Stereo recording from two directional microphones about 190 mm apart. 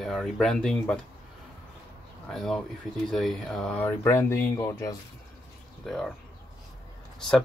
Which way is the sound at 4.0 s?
15° left (ahead or behind).